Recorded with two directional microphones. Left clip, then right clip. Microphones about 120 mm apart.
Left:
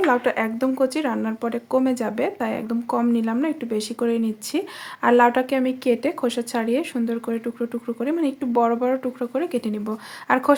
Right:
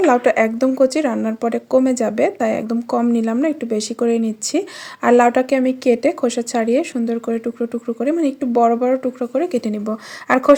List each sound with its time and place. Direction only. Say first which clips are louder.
0.0 s speech: right 6 dB; 40° right (ahead or behind)